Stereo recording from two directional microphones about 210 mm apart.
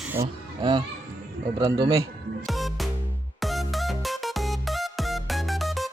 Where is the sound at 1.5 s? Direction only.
20° right (ahead or behind).